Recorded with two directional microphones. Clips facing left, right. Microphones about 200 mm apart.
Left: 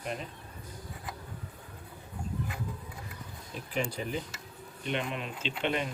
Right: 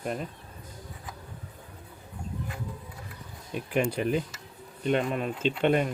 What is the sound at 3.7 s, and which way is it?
Speech, 60° right (ahead or behind).